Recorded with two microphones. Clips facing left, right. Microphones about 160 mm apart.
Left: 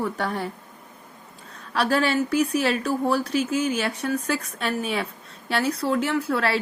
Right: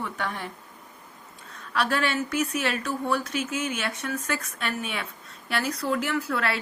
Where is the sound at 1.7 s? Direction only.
35° left (ahead or behind).